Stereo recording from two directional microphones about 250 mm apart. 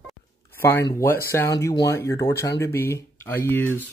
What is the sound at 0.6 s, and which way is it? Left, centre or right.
A man's voice, centre.